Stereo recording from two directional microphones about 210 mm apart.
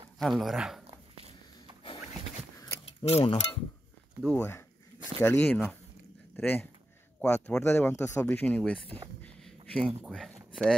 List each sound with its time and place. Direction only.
0.2 s speech: centre (ahead or behind)
0.8 s a sound: 30° right (ahead or behind)
2.6 s cutlery: 25° left (ahead or behind)
4.4 s speech: 10° left (ahead or behind)
9.2 s a sound: 5° left (ahead or behind)
10.0 s speech: centre (ahead or behind)